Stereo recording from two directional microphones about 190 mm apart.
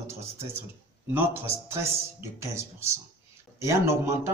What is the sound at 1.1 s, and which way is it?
Speech, 10° right (ahead or behind).